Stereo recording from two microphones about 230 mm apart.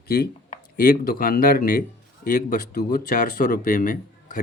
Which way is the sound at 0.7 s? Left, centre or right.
Left.